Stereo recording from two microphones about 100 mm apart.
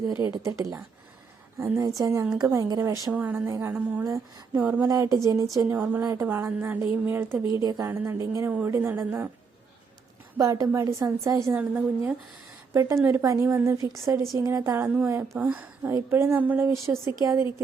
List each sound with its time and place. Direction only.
0.4 s speech: 30° right (ahead or behind)
3.1 s speech: 15° right (ahead or behind)
4.6 s speech: 20° right (ahead or behind)
4.9 s speech: 35° right (ahead or behind)
5.6 s a woman's voice: 20° right (ahead or behind)
6.0 s speech: 35° right (ahead or behind)
6.2 s speech: 20° right (ahead or behind)
7.6 s speech: 35° right (ahead or behind)
7.9 s speech: 20° right (ahead or behind)
10.3 s speech: 35° right (ahead or behind)
11.5 s a woman's voice: 15° right (ahead or behind)
12.7 s a woman's voice: 30° right (ahead or behind)